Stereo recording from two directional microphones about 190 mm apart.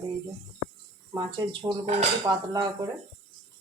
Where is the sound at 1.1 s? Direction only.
25° right (ahead or behind).